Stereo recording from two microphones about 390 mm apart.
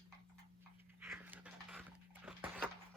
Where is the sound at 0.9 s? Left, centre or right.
Centre.